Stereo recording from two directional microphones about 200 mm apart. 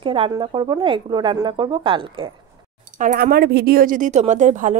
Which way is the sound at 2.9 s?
40° right (ahead or behind).